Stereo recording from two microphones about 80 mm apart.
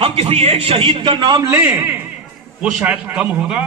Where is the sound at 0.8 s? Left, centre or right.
Right.